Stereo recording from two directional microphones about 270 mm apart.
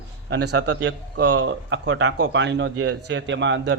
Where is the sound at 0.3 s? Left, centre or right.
Right.